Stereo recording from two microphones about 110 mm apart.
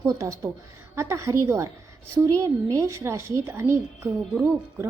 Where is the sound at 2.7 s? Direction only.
25° right (ahead or behind).